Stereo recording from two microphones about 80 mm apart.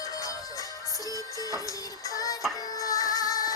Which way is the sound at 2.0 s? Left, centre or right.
Left.